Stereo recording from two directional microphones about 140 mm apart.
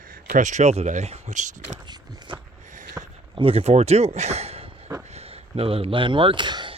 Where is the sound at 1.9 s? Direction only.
35° right (ahead or behind).